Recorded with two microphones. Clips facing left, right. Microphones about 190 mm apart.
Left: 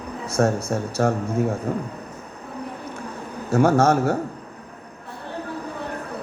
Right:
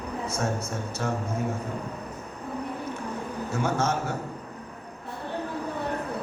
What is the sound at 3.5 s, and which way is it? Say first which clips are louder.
Speech: left 10 dB; 70° left (ahead or behind).